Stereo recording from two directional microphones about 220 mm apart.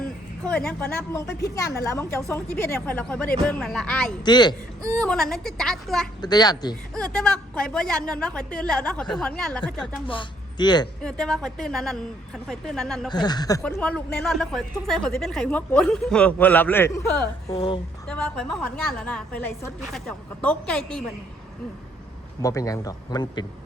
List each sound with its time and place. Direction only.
0.4 s a man's voice: 5° left (ahead or behind)
4.2 s speech: 20° left (ahead or behind)
4.8 s speech: 5° left (ahead or behind)
6.2 s a man's voice: 20° left (ahead or behind)
6.9 s speech: 5° left (ahead or behind)
10.1 s speech: 20° left (ahead or behind)
11.0 s speech: 5° left (ahead or behind)
13.1 s speech: 20° left (ahead or behind)
13.6 s speech: 5° left (ahead or behind)
17.5 s speech: 25° left (ahead or behind)
18.1 s speech: 5° left (ahead or behind)
22.4 s a man's voice: 15° left (ahead or behind)